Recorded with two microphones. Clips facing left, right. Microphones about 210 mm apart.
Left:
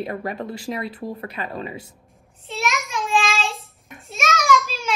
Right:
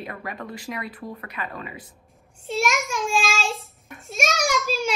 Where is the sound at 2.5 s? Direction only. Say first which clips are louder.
Right 2 dB; 50° right (ahead or behind).